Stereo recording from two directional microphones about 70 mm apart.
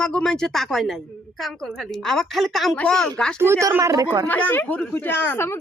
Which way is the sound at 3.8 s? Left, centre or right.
Right.